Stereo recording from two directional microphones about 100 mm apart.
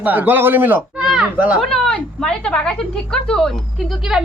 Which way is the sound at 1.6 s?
5° left (ahead or behind).